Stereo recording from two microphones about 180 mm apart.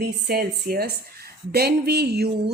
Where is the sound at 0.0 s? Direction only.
60° right (ahead or behind).